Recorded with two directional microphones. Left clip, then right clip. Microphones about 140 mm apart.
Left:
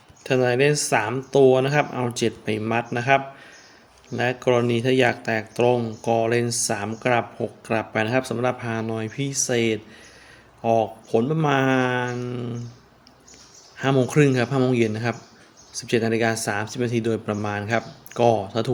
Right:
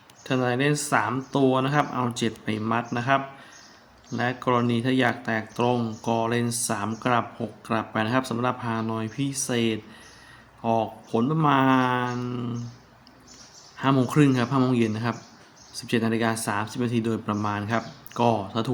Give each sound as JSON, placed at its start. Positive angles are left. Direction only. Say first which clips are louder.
{"t": 0.2, "sound": "speech", "louder": "left 5 dB", "side_deg": 45}
{"t": 4.2, "sound": "speech", "louder": "left 3 dB", "side_deg": 40}
{"t": 13.7, "sound": "speech", "louder": "left 2 dB", "side_deg": 35}